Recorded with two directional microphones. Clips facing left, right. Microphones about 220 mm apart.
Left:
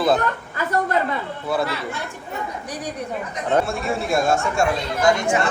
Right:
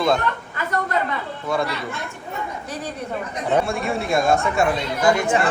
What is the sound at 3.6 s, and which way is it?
Speech, centre (ahead or behind).